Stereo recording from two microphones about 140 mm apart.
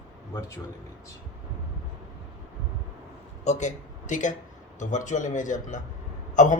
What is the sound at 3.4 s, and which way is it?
A man's voice, 55° left (ahead or behind).